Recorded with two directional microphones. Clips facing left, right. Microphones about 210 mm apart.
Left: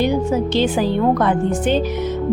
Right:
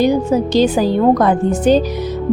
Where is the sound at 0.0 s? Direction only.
40° right (ahead or behind).